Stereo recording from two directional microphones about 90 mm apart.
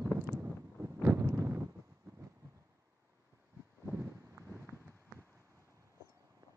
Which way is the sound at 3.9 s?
25° right (ahead or behind).